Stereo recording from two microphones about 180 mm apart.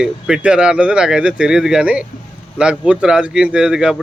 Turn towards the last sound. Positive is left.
turn(degrees=-5)  # may be behind; listen again after turning